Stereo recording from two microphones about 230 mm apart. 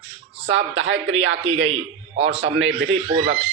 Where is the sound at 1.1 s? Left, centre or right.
Right.